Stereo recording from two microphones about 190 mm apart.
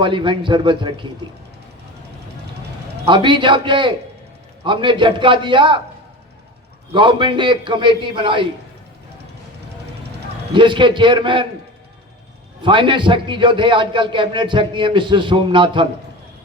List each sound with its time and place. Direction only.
0.0 s a man's voice: 25° right (ahead or behind)
3.1 s a man's voice: 25° right (ahead or behind)
6.9 s a man's voice: 25° right (ahead or behind)
10.5 s a man's voice: 25° right (ahead or behind)
12.6 s a man's voice: 25° right (ahead or behind)